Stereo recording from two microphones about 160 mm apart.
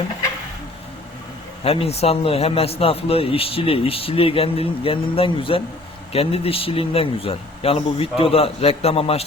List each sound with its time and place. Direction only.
1.6 s a man's voice: 40° left (ahead or behind)